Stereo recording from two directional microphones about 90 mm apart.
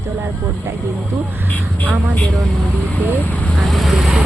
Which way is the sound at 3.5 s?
Centre (ahead or behind).